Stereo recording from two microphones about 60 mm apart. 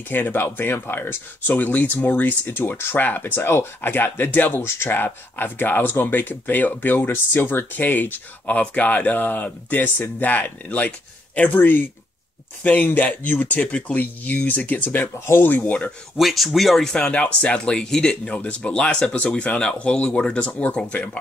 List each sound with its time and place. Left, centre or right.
0.1 s speech: left
16.2 s speech: centre
16.9 s speech: centre